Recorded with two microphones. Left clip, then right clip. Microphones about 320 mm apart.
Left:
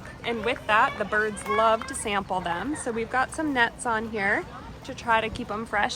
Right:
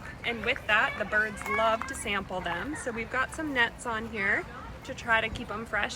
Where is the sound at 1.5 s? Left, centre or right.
Left.